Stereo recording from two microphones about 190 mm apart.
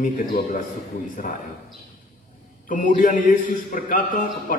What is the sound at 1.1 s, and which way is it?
Speech, 45° left (ahead or behind).